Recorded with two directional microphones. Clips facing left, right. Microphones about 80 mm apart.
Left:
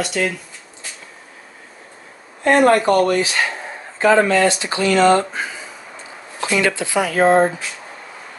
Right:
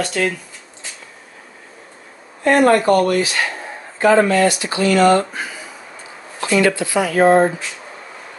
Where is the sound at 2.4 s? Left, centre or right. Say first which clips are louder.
Even; left.